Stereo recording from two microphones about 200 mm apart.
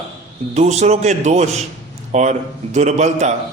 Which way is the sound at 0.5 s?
35° right (ahead or behind).